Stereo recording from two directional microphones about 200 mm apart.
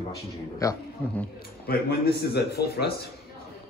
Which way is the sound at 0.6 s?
15° left (ahead or behind).